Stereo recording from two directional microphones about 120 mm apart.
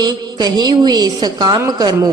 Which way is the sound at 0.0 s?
35° right (ahead or behind).